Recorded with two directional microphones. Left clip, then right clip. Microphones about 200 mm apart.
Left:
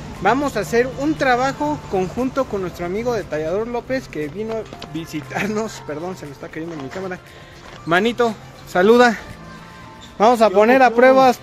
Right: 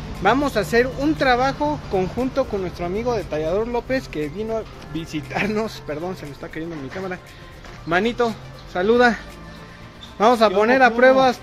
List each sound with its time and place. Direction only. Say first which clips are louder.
0.2 s speech: even; centre (ahead or behind)
7.9 s speech: left 3 dB; 30° left (ahead or behind)
8.7 s speech: left 4 dB; 55° left (ahead or behind)
10.1 s speech: left 3 dB; 20° left (ahead or behind)